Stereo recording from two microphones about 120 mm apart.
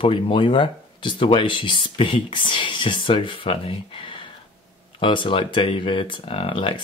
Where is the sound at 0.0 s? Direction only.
45° left (ahead or behind).